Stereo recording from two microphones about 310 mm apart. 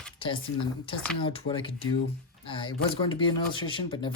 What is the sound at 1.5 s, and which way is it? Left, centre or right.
Speech, centre.